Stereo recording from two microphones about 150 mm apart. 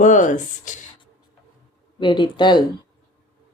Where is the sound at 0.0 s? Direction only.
55° left (ahead or behind).